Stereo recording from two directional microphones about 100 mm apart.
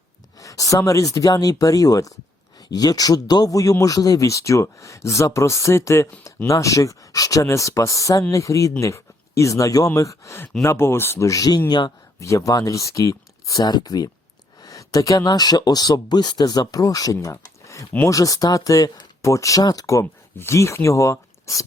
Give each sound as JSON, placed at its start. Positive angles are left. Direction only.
{"t": 0.3, "sound": "speech", "side_deg": 35}
{"t": 17.4, "sound": "a sound", "side_deg": 35}
{"t": 18.0, "sound": "speech", "side_deg": 35}